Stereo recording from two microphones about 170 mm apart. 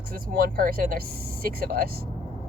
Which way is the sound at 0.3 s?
55° right (ahead or behind).